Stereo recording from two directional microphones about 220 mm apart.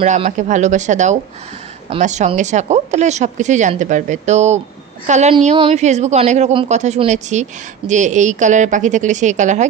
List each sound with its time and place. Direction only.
0.0 s a man's voice: 30° right (ahead or behind)